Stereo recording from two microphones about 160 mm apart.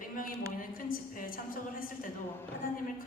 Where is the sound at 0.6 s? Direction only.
60° left (ahead or behind).